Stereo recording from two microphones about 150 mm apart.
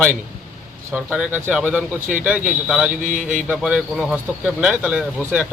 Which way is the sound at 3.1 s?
60° right (ahead or behind).